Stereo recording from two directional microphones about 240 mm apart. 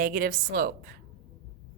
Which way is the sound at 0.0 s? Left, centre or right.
Right.